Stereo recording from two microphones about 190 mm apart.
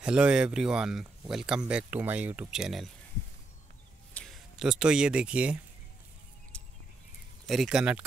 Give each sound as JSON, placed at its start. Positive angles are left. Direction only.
{"t": 0.0, "sound": "speech", "side_deg": -5}
{"t": 4.1, "sound": "speech", "side_deg": 0}
{"t": 6.5, "sound": "a sound", "side_deg": 5}
{"t": 7.4, "sound": "speech", "side_deg": 0}